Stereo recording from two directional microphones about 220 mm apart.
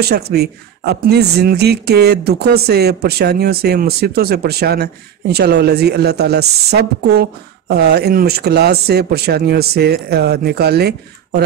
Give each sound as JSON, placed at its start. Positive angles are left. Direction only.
{"t": 0.0, "sound": "a woman's voice", "side_deg": -45}